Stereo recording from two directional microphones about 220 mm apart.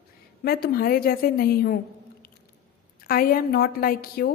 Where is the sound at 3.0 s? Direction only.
40° left (ahead or behind).